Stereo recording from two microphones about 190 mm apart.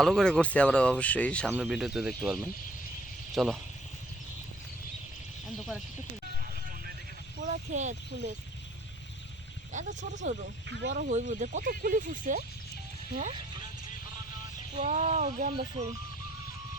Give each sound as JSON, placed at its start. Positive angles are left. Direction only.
{"t": 0.0, "sound": "speech", "side_deg": 5}
{"t": 7.3, "sound": "speech", "side_deg": -40}
{"t": 9.7, "sound": "speech", "side_deg": -40}
{"t": 10.7, "sound": "speech", "side_deg": -70}
{"t": 10.9, "sound": "speech", "side_deg": -40}
{"t": 14.8, "sound": "speech", "side_deg": -40}